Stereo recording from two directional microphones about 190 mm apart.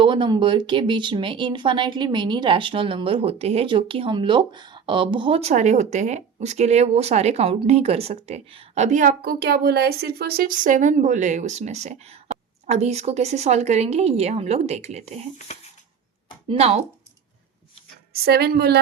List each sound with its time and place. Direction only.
0.0 s speech: 25° right (ahead or behind)
16.5 s speech: 35° right (ahead or behind)
18.1 s a woman's voice: 55° right (ahead or behind)